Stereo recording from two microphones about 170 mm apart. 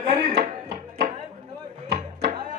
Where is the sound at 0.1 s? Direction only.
40° right (ahead or behind).